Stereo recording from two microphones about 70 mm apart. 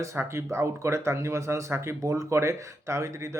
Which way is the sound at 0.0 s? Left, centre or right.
Right.